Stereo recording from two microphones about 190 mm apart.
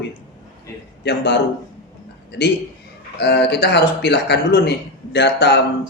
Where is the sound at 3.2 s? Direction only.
60° left (ahead or behind).